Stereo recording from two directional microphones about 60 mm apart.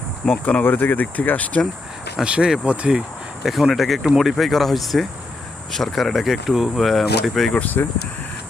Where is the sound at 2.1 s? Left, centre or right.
Centre.